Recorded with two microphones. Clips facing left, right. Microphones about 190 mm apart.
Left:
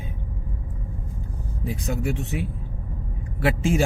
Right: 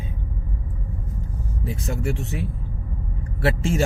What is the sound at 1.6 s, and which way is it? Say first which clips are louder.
Speech: left 1 dB; centre (ahead or behind).